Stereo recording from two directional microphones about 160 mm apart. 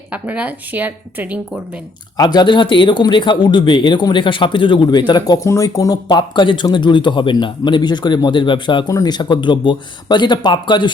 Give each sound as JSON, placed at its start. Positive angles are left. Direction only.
{"t": 0.1, "sound": "a woman's voice", "side_deg": -10}
{"t": 2.1, "sound": "speech", "side_deg": 25}